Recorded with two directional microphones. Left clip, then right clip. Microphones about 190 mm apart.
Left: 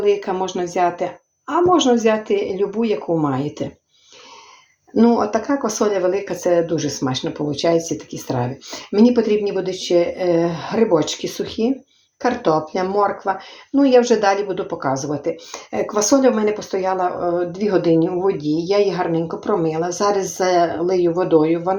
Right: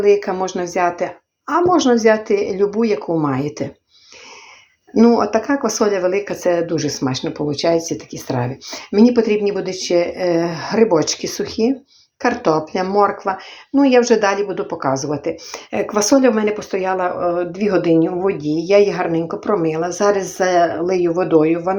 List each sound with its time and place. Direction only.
0.1 s speech: 20° right (ahead or behind)
4.9 s speech: 25° right (ahead or behind)